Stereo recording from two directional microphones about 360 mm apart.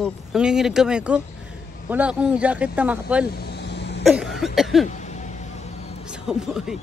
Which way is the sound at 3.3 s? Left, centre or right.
Left.